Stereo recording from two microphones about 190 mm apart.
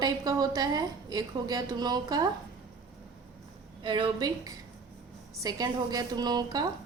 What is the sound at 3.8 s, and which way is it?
A woman's voice, 25° right (ahead or behind).